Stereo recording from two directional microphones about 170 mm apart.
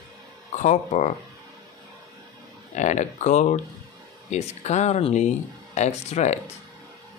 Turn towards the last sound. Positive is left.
turn(degrees=40)  # may be behind; listen again after turning